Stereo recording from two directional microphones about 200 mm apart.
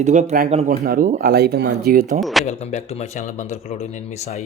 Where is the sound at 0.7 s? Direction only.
50° right (ahead or behind).